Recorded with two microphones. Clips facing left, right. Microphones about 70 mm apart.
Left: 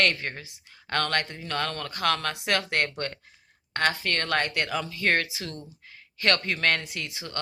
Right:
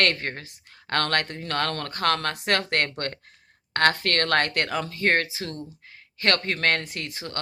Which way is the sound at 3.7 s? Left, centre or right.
Right.